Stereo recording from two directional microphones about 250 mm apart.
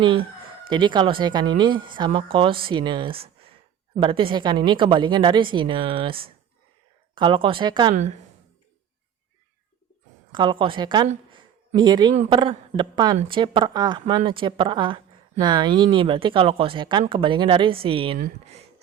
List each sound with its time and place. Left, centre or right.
0.7 s a woman's voice: centre
10.3 s a woman's voice: centre